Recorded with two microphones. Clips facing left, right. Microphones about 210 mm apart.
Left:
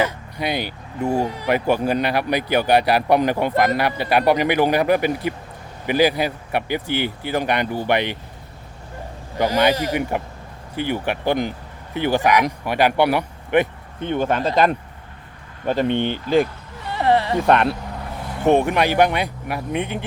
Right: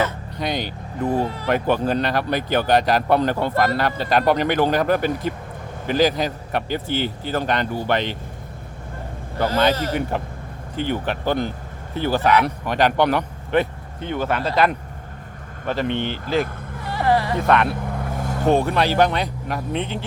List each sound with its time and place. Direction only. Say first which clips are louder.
0.0 s speech: left 1 dB; 10° left (ahead or behind)
9.4 s speech: left 1 dB; 10° left (ahead or behind)
16.0 s speech: left 4 dB; centre (ahead or behind)
16.9 s music: left 2 dB; 25° left (ahead or behind)
18.4 s speech: left 2 dB; 15° left (ahead or behind)